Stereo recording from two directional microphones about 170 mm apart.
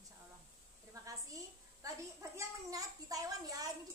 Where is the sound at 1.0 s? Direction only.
20° right (ahead or behind).